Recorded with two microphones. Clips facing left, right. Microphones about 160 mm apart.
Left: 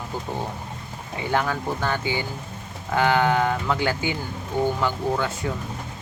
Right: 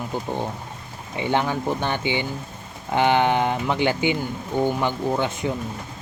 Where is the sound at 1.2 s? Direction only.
20° right (ahead or behind).